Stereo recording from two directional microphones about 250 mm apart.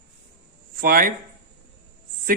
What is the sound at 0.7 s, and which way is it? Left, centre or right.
Speech, right.